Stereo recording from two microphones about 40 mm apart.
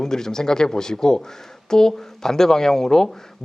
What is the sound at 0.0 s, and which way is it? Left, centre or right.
Speech, centre.